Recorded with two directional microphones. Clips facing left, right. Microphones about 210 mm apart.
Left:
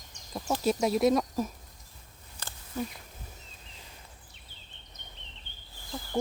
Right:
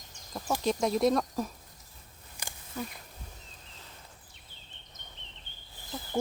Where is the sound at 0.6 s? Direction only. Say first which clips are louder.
Left 1 dB; 5° left (ahead or behind).